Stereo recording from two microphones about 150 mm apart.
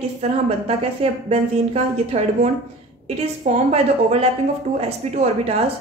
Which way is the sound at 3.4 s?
50° right (ahead or behind).